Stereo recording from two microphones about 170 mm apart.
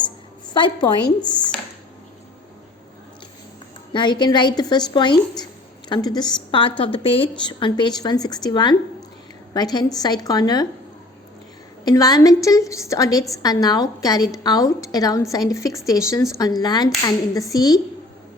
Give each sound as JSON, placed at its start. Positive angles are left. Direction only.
{"t": 0.5, "sound": "a woman's voice", "side_deg": 25}
{"t": 3.9, "sound": "a woman's voice", "side_deg": 25}
{"t": 11.9, "sound": "a woman's voice", "side_deg": 20}